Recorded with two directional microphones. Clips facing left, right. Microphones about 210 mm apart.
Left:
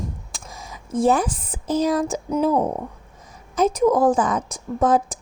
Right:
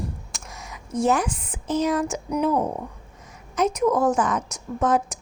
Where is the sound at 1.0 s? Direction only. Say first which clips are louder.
Left 3 dB; 35° left (ahead or behind).